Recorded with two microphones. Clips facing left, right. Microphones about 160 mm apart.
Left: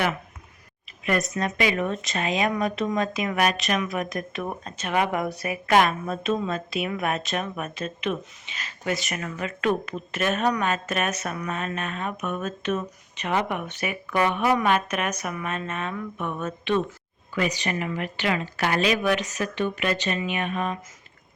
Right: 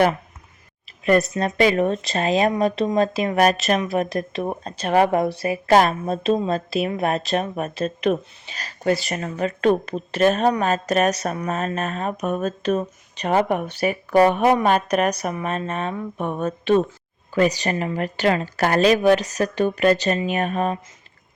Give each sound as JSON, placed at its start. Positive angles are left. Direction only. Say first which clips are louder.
{"t": 1.0, "sound": "speech", "louder": "right 7 dB", "side_deg": -35}